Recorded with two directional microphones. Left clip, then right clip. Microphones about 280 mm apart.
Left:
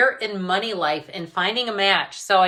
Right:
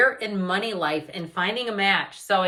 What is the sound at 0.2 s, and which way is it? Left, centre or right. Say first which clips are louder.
A woman's voice: left 3 dB; centre.